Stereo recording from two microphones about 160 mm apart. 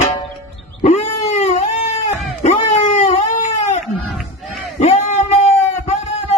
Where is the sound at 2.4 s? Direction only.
45° left (ahead or behind).